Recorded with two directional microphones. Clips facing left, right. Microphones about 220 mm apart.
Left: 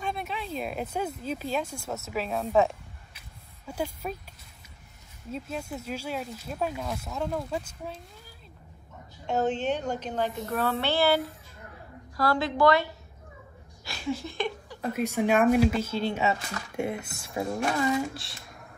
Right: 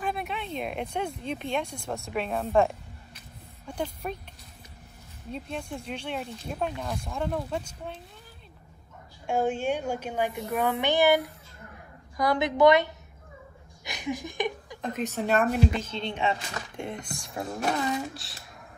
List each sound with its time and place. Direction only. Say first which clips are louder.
0.0 s speech: right 1 dB; centre (ahead or behind)
5.3 s speech: even; 5° left (ahead or behind)
9.2 s a woman's voice: even; 10° right (ahead or behind)
13.8 s a sound: left 1 dB; 15° right (ahead or behind)
14.8 s speech: left 3 dB; 10° left (ahead or behind)